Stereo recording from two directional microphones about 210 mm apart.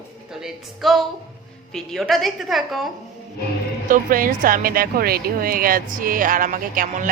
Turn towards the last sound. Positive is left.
turn(degrees=-40)  # may be behind; listen again after turning